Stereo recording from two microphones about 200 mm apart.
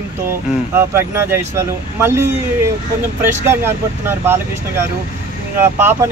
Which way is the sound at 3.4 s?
10° right (ahead or behind).